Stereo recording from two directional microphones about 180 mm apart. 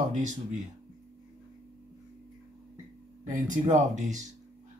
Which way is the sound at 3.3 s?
45° right (ahead or behind).